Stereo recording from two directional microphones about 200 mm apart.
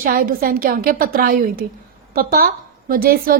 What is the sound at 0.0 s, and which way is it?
A woman's voice, 45° right (ahead or behind).